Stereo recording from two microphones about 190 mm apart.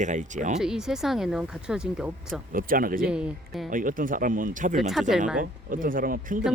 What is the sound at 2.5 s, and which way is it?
Speech, 50° right (ahead or behind).